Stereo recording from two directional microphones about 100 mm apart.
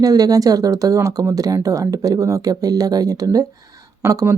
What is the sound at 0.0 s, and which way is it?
Speech, 35° right (ahead or behind).